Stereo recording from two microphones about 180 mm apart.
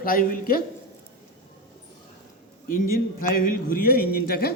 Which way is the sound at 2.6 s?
50° left (ahead or behind).